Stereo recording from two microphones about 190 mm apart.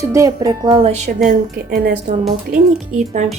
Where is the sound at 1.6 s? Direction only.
50° right (ahead or behind).